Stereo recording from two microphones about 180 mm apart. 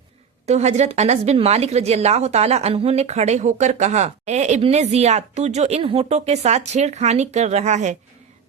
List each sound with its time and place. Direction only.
0.4 s speech: 40° right (ahead or behind)